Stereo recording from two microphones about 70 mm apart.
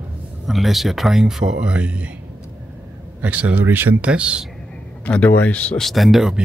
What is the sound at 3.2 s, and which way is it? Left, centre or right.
Speech, right.